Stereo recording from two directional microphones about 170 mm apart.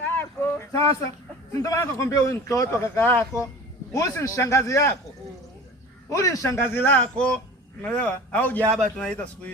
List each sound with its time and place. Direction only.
0.0 s a sound: 10° left (ahead or behind)
1.5 s a man's voice: 20° left (ahead or behind)
6.1 s a man's voice: 20° left (ahead or behind)